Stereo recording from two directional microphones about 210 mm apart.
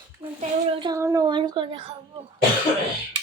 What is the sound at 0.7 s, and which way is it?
Speech, 20° right (ahead or behind).